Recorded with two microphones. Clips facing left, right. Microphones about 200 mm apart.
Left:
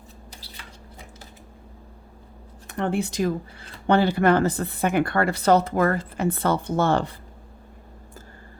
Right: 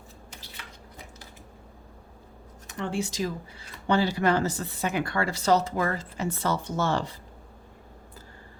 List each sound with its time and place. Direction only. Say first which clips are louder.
2.6 s speech: left 5 dB; 55° left (ahead or behind)